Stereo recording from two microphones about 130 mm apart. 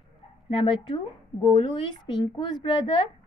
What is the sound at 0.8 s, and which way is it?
A woman's voice, 35° left (ahead or behind).